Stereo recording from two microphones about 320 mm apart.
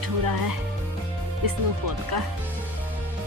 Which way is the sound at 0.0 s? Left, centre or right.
Right.